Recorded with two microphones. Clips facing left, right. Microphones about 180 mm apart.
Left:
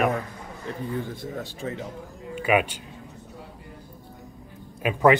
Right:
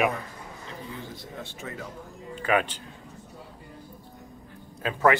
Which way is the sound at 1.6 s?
30° left (ahead or behind).